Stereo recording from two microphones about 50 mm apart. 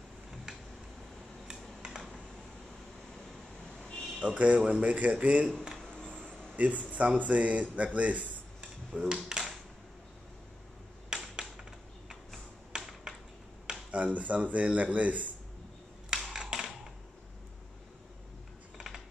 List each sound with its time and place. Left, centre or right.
1.8 s typing: centre
4.2 s a man's voice: right
5.8 s music: centre
6.5 s a man's voice: right
7.7 s a sound: right
9.1 s speech: centre
11.1 s a sound: centre
12.7 s computer keyboard: centre
13.9 s a man's voice: right
16.1 s a sound: centre